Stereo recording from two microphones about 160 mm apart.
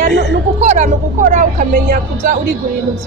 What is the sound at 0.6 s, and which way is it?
A woman's voice, 50° right (ahead or behind).